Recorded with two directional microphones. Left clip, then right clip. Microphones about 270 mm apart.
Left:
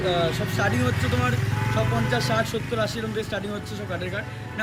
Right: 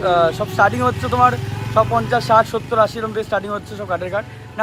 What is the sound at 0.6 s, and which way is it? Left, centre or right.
Speech, right.